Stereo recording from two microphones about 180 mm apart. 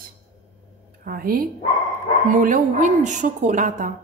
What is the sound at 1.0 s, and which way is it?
A woman's voice, 55° right (ahead or behind).